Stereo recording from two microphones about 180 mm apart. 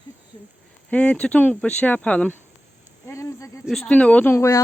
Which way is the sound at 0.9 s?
5° left (ahead or behind).